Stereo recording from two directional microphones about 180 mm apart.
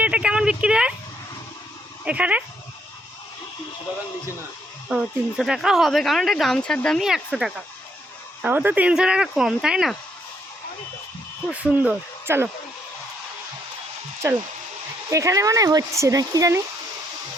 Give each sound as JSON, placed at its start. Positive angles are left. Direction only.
{"t": 0.0, "sound": "a woman's voice", "side_deg": -5}
{"t": 2.0, "sound": "speech", "side_deg": -5}
{"t": 4.9, "sound": "speech", "side_deg": 0}
{"t": 11.4, "sound": "speech", "side_deg": -10}
{"t": 14.2, "sound": "speech", "side_deg": -15}